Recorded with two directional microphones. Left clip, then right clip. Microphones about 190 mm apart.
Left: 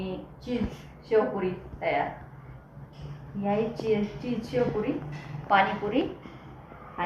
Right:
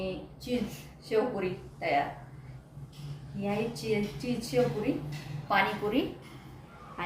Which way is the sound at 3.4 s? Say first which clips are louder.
Left 5 dB; 25° right (ahead or behind).